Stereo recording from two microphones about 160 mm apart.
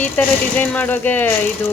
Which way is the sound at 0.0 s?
10° left (ahead or behind).